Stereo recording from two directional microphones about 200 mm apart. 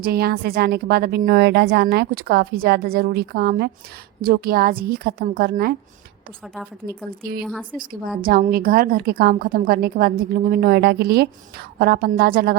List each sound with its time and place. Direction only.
0.0 s a woman's voice: 50° right (ahead or behind)
6.8 s a woman's voice: 40° right (ahead or behind)
7.4 s speech: 5° left (ahead or behind)
7.8 s a woman's voice: 45° right (ahead or behind)